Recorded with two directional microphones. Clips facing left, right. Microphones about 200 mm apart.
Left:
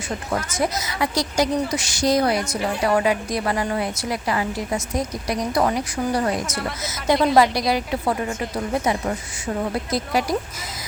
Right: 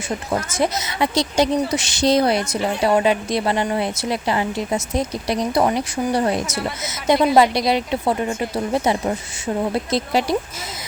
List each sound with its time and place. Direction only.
0.3 s a woman's voice: 25° right (ahead or behind)